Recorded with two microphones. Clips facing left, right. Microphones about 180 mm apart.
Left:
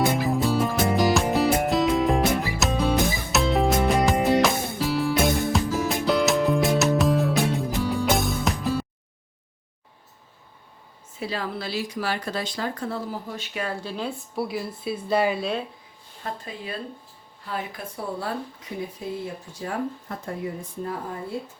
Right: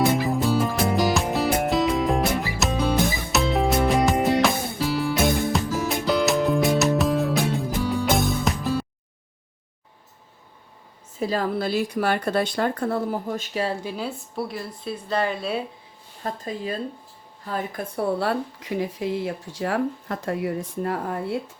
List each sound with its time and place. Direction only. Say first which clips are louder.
0.0 s music: right 1 dB; centre (ahead or behind)
11.2 s speech: right 6 dB; 45° right (ahead or behind)
13.8 s a woman's voice: right 1 dB; 5° right (ahead or behind)
16.2 s speech: right 5 dB; 40° right (ahead or behind)
17.9 s speech: right 7 dB; 70° right (ahead or behind)